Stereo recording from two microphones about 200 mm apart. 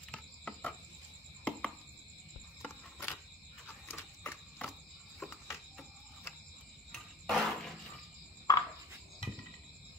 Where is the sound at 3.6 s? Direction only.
10° left (ahead or behind).